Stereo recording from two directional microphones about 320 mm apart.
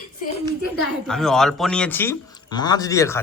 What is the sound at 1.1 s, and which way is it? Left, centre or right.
Speech, centre.